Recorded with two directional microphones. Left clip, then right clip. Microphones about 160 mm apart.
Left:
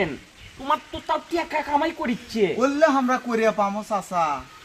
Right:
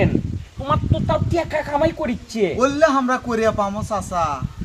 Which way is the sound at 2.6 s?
20° right (ahead or behind).